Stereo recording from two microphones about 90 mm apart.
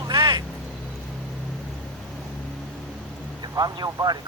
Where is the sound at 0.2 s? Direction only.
60° right (ahead or behind).